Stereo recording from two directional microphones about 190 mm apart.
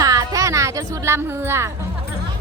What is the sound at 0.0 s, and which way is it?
Music, 15° right (ahead or behind).